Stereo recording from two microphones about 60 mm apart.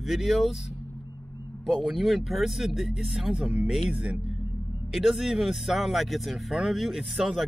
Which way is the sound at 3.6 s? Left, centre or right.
Centre.